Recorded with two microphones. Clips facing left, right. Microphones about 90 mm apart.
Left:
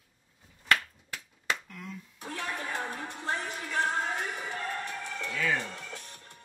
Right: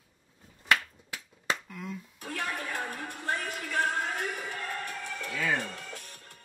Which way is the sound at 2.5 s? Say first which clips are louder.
Left 3 dB; 20° left (ahead or behind).